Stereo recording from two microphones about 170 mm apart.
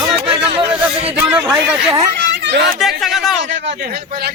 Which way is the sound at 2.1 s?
90° right.